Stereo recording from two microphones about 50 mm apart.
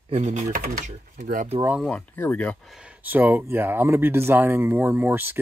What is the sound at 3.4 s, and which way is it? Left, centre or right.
Speech, right.